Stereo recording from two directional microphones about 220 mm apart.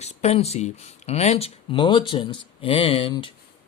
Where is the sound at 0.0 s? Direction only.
30° left (ahead or behind).